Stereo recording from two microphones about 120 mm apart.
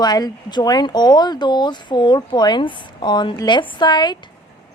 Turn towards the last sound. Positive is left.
turn(degrees=40)  # may be behind; listen again after turning